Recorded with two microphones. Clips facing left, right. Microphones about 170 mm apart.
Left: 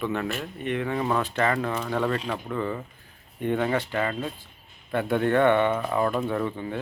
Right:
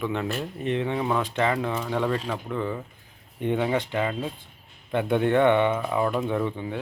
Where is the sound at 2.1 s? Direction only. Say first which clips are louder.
Even; centre (ahead or behind).